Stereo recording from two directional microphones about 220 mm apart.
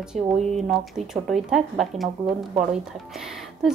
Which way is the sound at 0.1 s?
35° right (ahead or behind).